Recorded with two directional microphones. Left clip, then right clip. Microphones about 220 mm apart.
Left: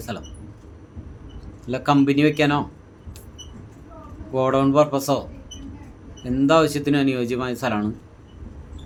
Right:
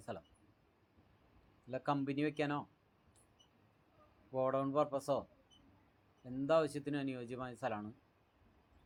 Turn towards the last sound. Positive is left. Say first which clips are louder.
# left 17 dB
turn(degrees=-25)  # may be behind; listen again after turning